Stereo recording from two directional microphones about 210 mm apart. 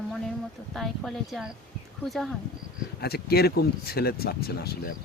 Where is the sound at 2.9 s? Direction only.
50° left (ahead or behind).